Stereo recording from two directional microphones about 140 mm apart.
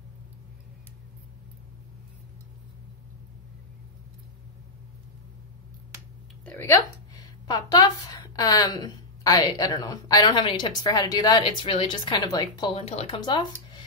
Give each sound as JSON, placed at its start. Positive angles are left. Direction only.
{"t": 6.4, "sound": "a sound", "side_deg": 15}
{"t": 7.4, "sound": "a woman's voice", "side_deg": 30}
{"t": 12.7, "sound": "speech", "side_deg": 45}
{"t": 13.2, "sound": "speech", "side_deg": 30}